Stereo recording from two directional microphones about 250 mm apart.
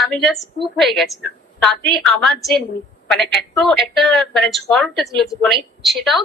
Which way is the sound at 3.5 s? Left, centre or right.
Centre.